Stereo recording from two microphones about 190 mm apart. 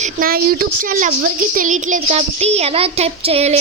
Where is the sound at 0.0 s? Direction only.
50° right (ahead or behind).